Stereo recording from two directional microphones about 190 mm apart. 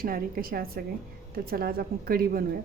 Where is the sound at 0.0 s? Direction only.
50° right (ahead or behind).